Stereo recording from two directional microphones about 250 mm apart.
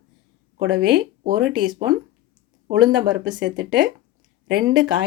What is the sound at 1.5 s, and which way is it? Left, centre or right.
Speech, centre.